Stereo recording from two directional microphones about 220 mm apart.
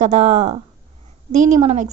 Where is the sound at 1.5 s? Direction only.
30° right (ahead or behind).